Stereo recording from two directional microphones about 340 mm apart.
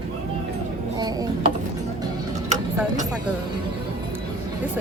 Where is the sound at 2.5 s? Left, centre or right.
Right.